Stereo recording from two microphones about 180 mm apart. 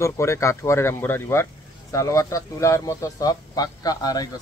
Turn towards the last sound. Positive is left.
turn(degrees=20)  # may be behind; listen again after turning